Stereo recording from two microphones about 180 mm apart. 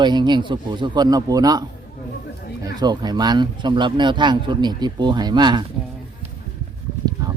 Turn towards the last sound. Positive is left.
turn(degrees=-20)  # may be behind; listen again after turning